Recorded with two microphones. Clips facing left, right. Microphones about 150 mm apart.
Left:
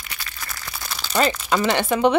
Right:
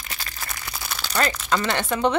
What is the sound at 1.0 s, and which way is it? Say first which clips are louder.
Speech: left 4 dB; 10° left (ahead or behind).